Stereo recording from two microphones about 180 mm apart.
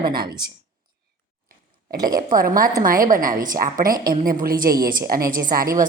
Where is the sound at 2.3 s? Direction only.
50° right (ahead or behind).